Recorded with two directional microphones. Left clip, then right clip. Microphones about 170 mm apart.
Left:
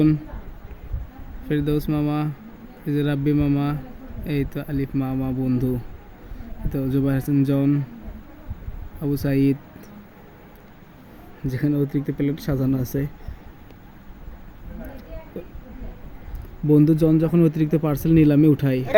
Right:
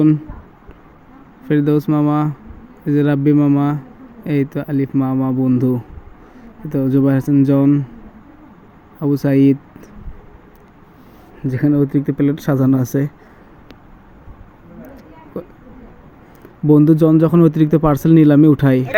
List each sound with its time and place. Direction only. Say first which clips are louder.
1.5 s speech: right 8 dB; 15° right (ahead or behind)
9.0 s speech: right 8 dB; 15° right (ahead or behind)
11.4 s speech: right 7 dB; 15° right (ahead or behind)
16.6 s speech: right 6 dB; 20° right (ahead or behind)